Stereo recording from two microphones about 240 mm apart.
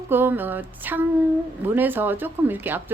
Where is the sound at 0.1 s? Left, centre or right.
Centre.